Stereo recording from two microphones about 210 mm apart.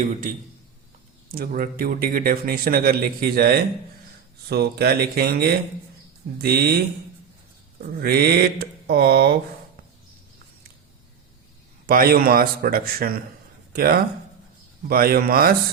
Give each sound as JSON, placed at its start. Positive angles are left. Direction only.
{"t": 0.0, "sound": "a man's voice", "side_deg": -40}
{"t": 11.9, "sound": "a man's voice", "side_deg": -45}